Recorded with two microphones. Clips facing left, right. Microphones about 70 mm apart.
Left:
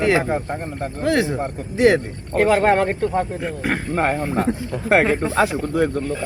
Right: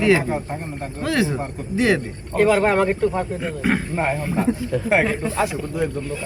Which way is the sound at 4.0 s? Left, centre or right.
Left.